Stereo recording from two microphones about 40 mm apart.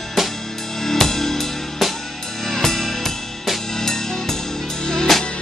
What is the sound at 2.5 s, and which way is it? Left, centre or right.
Music, centre.